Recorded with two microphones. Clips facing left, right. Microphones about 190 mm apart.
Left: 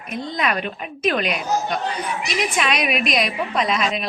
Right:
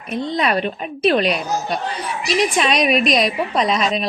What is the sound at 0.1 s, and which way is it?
A woman's voice, 30° right (ahead or behind).